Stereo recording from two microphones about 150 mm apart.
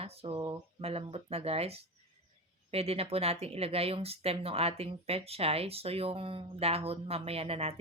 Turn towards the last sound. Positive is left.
turn(degrees=-40)  # may be behind; listen again after turning